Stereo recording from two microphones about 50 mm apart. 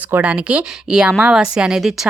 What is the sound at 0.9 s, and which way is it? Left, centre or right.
Speech, centre.